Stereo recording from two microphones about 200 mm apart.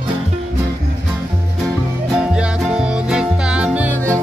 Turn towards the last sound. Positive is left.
turn(degrees=-10)  # may be behind; listen again after turning